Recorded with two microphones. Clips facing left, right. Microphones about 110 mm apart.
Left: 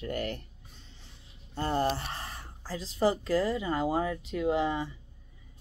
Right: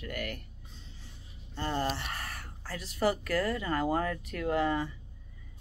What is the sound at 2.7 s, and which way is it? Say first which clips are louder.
Speech: left 2 dB; 25° left (ahead or behind).